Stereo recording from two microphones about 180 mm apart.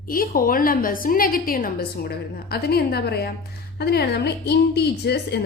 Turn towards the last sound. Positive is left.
turn(degrees=65)  # may be behind; listen again after turning